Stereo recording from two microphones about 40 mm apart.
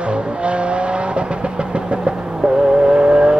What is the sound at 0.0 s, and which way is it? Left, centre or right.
Vehicle, right.